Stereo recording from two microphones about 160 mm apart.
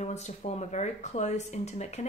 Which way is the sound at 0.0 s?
45° left (ahead or behind).